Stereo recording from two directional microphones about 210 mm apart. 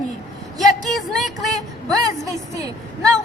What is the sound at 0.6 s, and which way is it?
Speech, centre (ahead or behind).